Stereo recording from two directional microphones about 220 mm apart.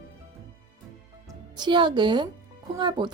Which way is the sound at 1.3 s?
20° right (ahead or behind).